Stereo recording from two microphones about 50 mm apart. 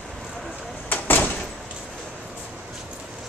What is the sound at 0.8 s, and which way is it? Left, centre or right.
Door, left.